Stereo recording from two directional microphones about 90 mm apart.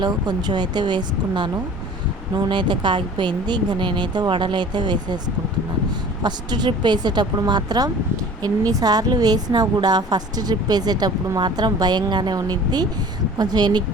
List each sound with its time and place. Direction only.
0.0 s speech: 50° right (ahead or behind)
6.2 s a woman's voice: 55° right (ahead or behind)